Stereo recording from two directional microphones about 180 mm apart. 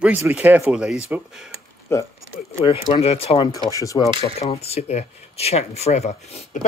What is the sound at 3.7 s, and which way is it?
Speech, 20° left (ahead or behind).